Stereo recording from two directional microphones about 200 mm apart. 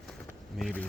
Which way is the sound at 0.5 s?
5° left (ahead or behind).